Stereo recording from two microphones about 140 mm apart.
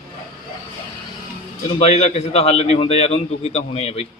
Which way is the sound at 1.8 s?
50° left (ahead or behind).